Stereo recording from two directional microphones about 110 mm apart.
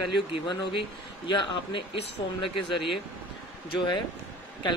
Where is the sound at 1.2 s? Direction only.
45° left (ahead or behind).